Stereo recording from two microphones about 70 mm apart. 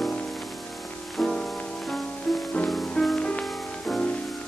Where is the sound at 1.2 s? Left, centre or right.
Centre.